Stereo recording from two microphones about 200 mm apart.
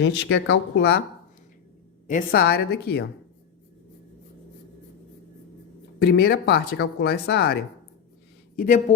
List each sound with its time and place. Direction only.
0.0 s speech: 65° left (ahead or behind)
2.0 s speech: 45° left (ahead or behind)
6.0 s speech: 50° left (ahead or behind)
8.5 s speech: 40° left (ahead or behind)